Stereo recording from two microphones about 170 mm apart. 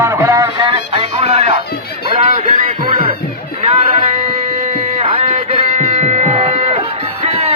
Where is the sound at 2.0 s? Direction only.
35° right (ahead or behind).